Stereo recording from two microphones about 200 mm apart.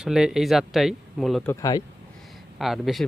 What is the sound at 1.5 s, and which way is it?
Speech, 15° left (ahead or behind).